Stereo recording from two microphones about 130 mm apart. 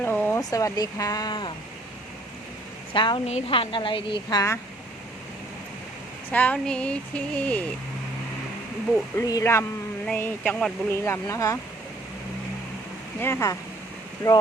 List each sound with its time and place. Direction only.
0.0 s a sound: 15° left (ahead or behind)
0.5 s speech: 25° left (ahead or behind)
2.9 s a woman's voice: 40° left (ahead or behind)
3.2 s a woman's voice: 50° left (ahead or behind); by 4.5 s 30° left (ahead or behind)
6.3 s speech: 10° left (ahead or behind)
9.1 s speech: 25° left (ahead or behind)
13.1 s speech: 15° left (ahead or behind)